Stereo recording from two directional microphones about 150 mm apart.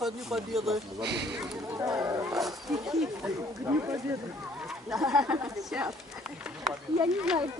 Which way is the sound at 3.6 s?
20° right (ahead or behind).